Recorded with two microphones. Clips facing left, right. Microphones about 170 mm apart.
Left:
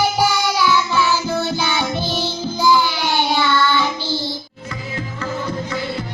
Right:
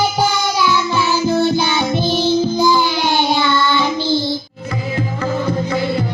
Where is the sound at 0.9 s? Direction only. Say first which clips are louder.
Right 3 dB; 15° right (ahead or behind).